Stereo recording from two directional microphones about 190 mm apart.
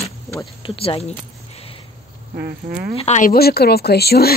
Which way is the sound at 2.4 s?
55° right (ahead or behind).